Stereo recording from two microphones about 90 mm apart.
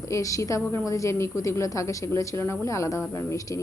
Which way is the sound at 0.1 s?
35° left (ahead or behind).